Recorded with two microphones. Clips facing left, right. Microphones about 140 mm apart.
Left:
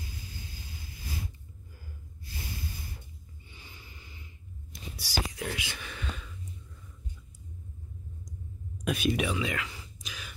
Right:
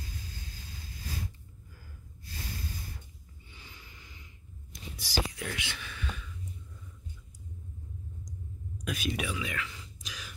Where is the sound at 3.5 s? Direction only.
15° left (ahead or behind).